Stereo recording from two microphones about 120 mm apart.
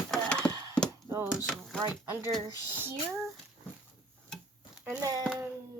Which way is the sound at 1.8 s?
20° right (ahead or behind).